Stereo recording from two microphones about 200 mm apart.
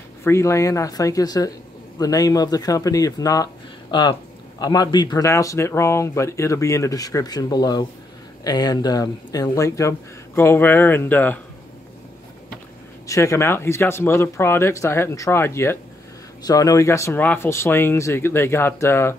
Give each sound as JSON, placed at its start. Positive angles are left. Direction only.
{"t": 0.2, "sound": "speech", "side_deg": 15}
{"t": 13.0, "sound": "speech", "side_deg": 15}